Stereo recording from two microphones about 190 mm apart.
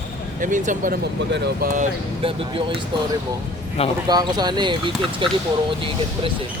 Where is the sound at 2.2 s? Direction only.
30° right (ahead or behind).